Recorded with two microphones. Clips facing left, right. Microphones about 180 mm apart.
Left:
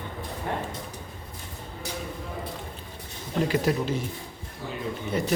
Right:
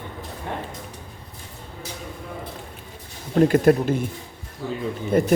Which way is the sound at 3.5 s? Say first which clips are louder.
Right 8 dB; 55° right (ahead or behind).